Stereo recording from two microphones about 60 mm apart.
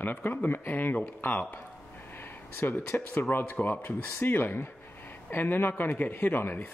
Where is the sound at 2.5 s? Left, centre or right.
Left.